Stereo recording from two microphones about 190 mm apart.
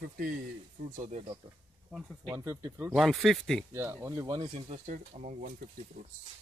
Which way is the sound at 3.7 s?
15° right (ahead or behind).